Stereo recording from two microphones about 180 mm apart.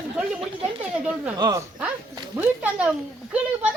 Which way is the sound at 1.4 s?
20° right (ahead or behind).